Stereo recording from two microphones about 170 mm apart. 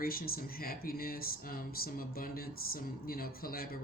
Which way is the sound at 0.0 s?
60° left (ahead or behind).